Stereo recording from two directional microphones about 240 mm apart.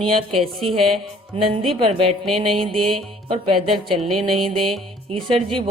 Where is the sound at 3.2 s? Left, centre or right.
Right.